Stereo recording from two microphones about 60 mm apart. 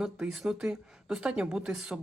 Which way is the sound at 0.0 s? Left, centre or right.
Centre.